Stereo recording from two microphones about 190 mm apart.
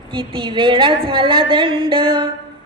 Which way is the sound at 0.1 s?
25° right (ahead or behind).